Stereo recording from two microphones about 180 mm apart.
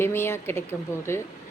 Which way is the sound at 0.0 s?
15° left (ahead or behind).